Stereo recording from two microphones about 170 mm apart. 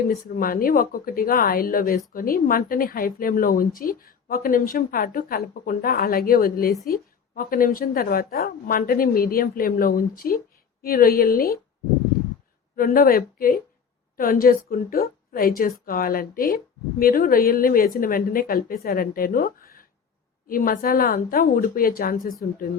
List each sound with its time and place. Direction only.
0.1 s speech: 55° left (ahead or behind)
12.7 s a woman's voice: 60° left (ahead or behind)